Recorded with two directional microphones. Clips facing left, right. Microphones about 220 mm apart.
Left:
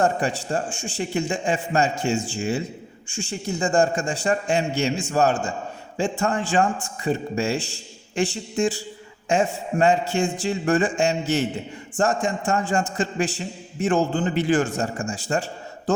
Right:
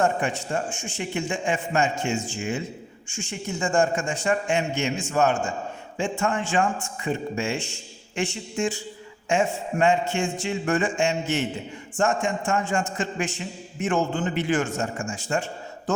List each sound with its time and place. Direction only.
0.0 s a man's voice: 35° left (ahead or behind)